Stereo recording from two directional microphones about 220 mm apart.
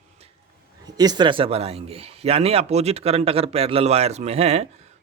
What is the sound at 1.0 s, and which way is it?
A man's voice, 20° right (ahead or behind).